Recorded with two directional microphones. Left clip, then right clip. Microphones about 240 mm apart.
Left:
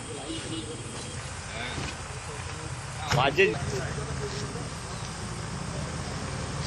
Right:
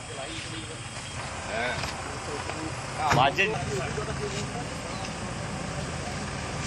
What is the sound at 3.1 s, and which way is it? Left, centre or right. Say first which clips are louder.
Speech: left 1 dB; centre.